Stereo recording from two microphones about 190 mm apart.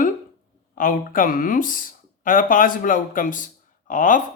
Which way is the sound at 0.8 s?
45° left (ahead or behind).